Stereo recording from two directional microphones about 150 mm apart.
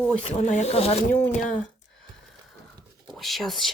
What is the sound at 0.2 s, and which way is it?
Speech, 50° left (ahead or behind).